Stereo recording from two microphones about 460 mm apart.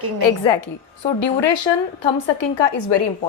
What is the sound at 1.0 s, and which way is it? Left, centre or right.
Speech, left.